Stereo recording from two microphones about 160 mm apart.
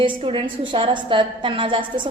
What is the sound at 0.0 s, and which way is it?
A woman's voice, 30° right (ahead or behind).